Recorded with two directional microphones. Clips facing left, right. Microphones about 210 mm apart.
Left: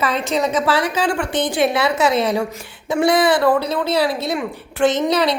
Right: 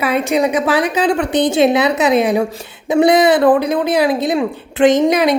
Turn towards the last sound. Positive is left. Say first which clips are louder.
# right 5 dB
turn(degrees=-15)  # may be behind; listen again after turning